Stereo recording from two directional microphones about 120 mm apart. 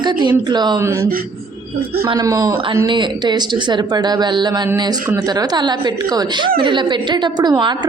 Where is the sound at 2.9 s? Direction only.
40° right (ahead or behind).